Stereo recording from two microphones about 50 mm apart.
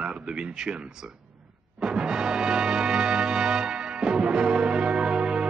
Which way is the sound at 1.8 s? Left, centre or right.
Centre.